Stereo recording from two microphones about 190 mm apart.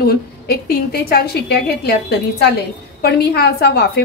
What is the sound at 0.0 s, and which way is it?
A woman's voice, 55° left (ahead or behind).